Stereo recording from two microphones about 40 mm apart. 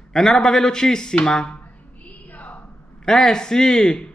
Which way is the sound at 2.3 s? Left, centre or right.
Left.